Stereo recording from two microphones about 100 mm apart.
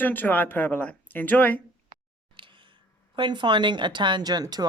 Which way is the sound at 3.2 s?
50° right (ahead or behind).